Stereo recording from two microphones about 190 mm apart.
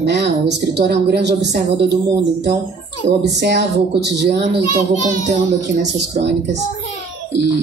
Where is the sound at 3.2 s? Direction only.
60° right (ahead or behind).